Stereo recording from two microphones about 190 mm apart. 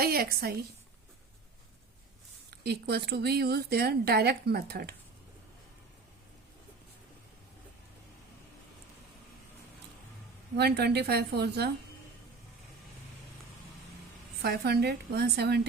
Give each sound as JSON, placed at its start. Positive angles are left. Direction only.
{"t": 0.0, "sound": "a woman's voice", "side_deg": -55}
{"t": 2.5, "sound": "speech", "side_deg": -60}
{"t": 10.6, "sound": "speech", "side_deg": -60}
{"t": 14.4, "sound": "speech", "side_deg": -55}